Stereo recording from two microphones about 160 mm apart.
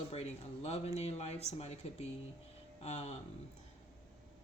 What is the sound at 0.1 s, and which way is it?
Speech, 40° left (ahead or behind).